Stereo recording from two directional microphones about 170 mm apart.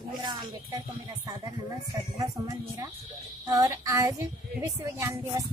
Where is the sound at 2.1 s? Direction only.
20° right (ahead or behind).